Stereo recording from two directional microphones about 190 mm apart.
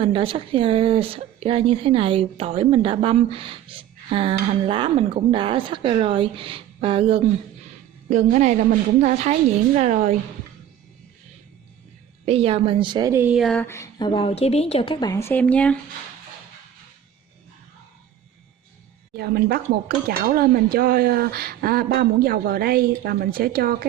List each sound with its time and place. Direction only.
0.0 s a woman's voice: 25° right (ahead or behind)
12.2 s speech: 30° right (ahead or behind); by 15.1 s 30° left (ahead or behind)
15.1 s speech: 10° left (ahead or behind)
19.1 s speech: 60° right (ahead or behind)